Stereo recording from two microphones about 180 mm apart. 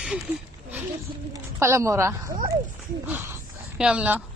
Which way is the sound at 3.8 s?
5° right (ahead or behind).